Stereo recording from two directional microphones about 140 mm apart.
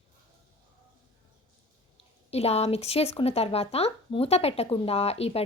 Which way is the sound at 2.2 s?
50° left (ahead or behind).